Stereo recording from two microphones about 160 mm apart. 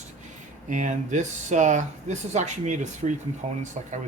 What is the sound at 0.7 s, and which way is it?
Speech, 50° right (ahead or behind).